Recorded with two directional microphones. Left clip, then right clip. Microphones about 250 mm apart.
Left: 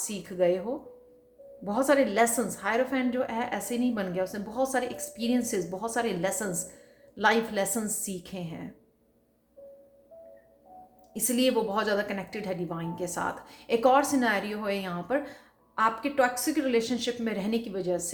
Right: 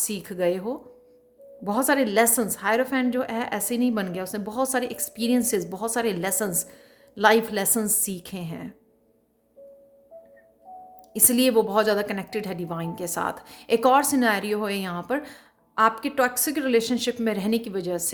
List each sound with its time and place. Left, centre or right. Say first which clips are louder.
0.0 s a woman's voice: right 1 dB; right
11.1 s a woman's voice: right 5 dB; right